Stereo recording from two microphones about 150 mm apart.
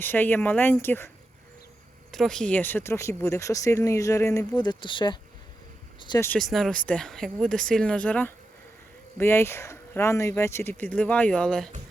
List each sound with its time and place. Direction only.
0.0 s speech: 15° left (ahead or behind)
2.1 s speech: 5° left (ahead or behind); by 5.1 s 30° left (ahead or behind)
6.1 s speech: 15° left (ahead or behind)
6.4 s speech: centre (ahead or behind)